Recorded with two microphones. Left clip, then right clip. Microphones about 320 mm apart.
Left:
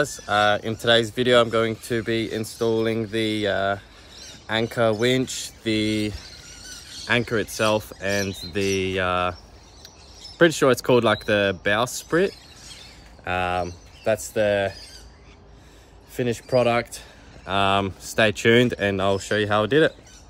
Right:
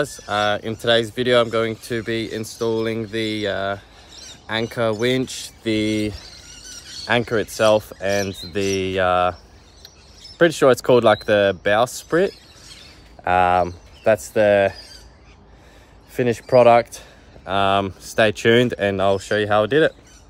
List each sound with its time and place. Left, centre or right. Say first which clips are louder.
0.3 s speech: left 1 dB; centre
13.2 s speech: right 8 dB; right
16.2 s speech: right 6 dB; right
17.5 s speech: right 3 dB; centre